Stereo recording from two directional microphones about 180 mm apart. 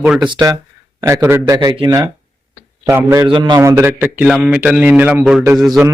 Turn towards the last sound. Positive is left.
turn(degrees=0)  # may be behind; listen again after turning